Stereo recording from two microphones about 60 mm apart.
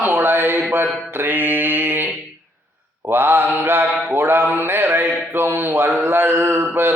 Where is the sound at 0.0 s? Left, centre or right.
Right.